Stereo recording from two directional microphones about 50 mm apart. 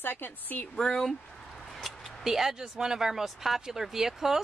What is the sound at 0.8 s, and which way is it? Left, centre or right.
Speech, centre.